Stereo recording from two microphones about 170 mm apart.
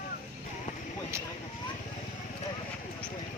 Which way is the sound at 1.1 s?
15° right (ahead or behind).